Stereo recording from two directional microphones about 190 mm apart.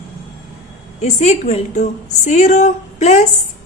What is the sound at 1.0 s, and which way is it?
A woman's voice, 35° left (ahead or behind).